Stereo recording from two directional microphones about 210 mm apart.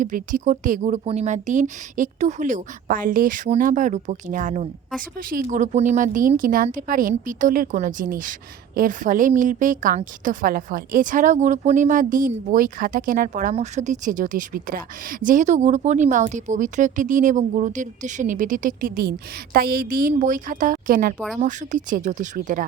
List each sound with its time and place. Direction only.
0.0 s speech: 40° right (ahead or behind)